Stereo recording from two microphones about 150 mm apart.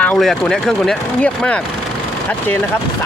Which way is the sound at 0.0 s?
5° left (ahead or behind).